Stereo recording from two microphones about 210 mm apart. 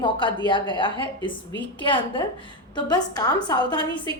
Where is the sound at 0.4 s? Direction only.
20° left (ahead or behind).